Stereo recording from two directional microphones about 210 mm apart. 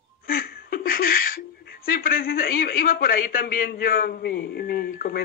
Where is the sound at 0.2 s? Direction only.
45° left (ahead or behind).